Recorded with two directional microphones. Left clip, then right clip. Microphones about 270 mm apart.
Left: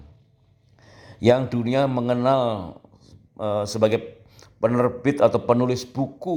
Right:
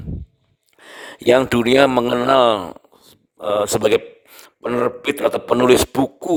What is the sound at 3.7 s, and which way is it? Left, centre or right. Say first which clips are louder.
A man's voice: right 4 dB; right.